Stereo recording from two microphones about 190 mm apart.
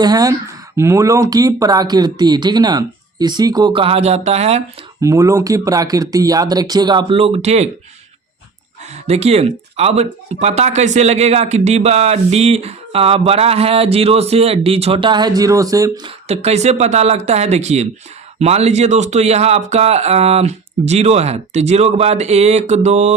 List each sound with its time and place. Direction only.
0.0 s speech: 20° right (ahead or behind)
4.9 s speech: 15° right (ahead or behind); by 7.7 s 35° right (ahead or behind)
9.0 s speech: 35° right (ahead or behind); by 16.1 s 20° right (ahead or behind)
16.2 s speech: 35° right (ahead or behind)